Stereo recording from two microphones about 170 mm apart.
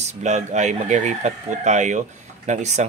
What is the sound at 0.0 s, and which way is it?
Speech, 45° right (ahead or behind).